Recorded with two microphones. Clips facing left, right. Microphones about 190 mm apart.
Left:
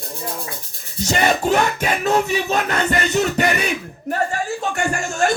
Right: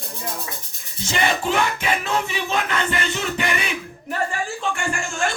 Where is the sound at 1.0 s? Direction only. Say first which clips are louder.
Left 4 dB; 40° left (ahead or behind).